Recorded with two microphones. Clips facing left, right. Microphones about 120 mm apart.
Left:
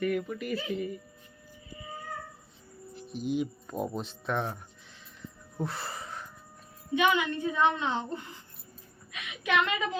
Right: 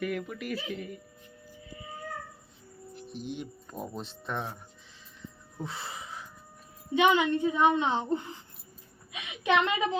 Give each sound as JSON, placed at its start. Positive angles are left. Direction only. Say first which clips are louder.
{"t": 0.0, "sound": "speech", "louder": "left 3 dB", "side_deg": 0}
{"t": 2.9, "sound": "speech", "louder": "left 7 dB", "side_deg": 0}
{"t": 5.6, "sound": "speech", "louder": "left 2 dB", "side_deg": 0}
{"t": 6.9, "sound": "a woman's voice", "louder": "right 3 dB", "side_deg": -25}